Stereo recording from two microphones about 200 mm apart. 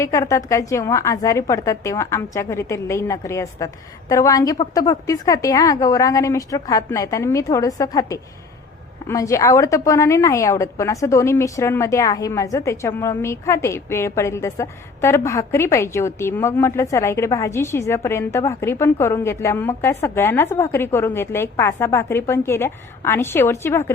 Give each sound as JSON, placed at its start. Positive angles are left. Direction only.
{"t": 0.0, "sound": "a woman's voice", "side_deg": 15}